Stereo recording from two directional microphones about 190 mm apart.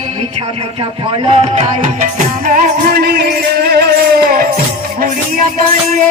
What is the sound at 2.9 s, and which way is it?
Music, 55° right (ahead or behind).